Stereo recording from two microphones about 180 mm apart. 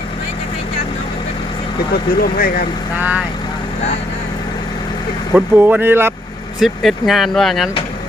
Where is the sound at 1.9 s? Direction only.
55° left (ahead or behind).